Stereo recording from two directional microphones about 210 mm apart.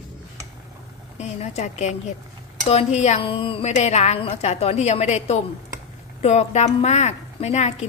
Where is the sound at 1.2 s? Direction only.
30° left (ahead or behind).